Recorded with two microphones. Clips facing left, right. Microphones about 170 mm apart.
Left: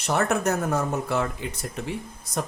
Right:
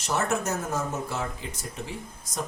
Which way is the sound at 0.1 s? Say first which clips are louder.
Left 4 dB; 60° left (ahead or behind).